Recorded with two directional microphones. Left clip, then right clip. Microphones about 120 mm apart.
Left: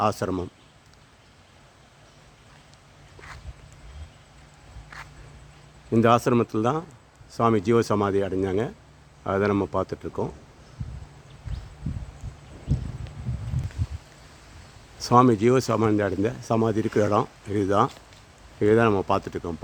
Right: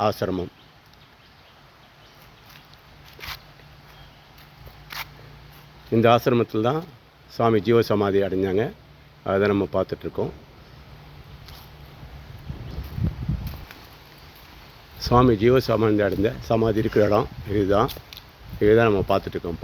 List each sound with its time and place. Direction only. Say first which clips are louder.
0.0 s speech: right 1 dB; 15° left (ahead or behind)
5.9 s speech: right 2 dB; 10° left (ahead or behind)
14.9 s speech: even; 15° left (ahead or behind)